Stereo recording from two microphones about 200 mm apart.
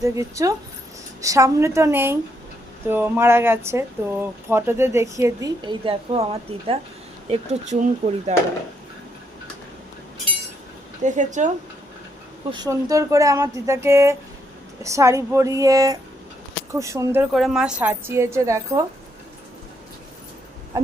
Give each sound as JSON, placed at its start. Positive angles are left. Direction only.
{"t": 0.0, "sound": "speech", "side_deg": -15}
{"t": 11.0, "sound": "speech", "side_deg": -40}
{"t": 12.5, "sound": "speech", "side_deg": -20}
{"t": 17.3, "sound": "speech", "side_deg": 0}